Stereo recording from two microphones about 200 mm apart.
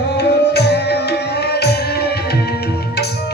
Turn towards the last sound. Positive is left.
turn(degrees=55)  # may be behind; listen again after turning